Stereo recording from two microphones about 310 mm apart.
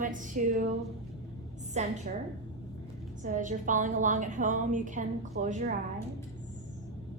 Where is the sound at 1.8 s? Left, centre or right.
Right.